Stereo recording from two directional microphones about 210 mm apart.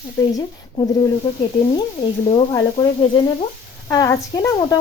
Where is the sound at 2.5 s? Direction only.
20° left (ahead or behind).